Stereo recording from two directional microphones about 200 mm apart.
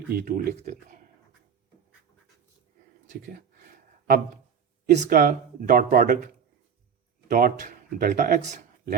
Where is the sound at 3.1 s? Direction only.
45° right (ahead or behind).